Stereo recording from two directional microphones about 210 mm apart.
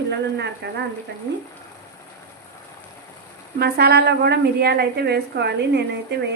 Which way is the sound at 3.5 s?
50° right (ahead or behind).